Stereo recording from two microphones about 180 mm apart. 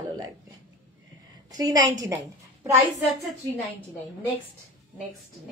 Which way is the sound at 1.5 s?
20° right (ahead or behind).